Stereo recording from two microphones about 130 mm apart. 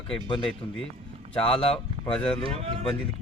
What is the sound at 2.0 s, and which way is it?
Speech, 5° left (ahead or behind).